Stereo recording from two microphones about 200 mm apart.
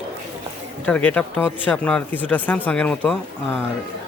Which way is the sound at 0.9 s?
5° left (ahead or behind).